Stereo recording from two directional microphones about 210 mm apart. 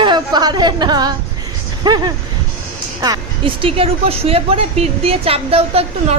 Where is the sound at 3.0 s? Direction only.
20° right (ahead or behind).